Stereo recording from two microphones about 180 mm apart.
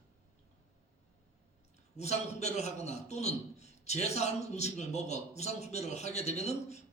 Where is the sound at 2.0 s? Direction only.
40° left (ahead or behind).